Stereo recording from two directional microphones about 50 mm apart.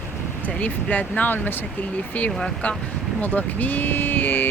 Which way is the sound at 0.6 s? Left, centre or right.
Left.